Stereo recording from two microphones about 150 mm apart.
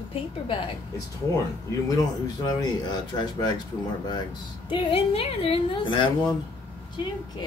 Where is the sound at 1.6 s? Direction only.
25° left (ahead or behind).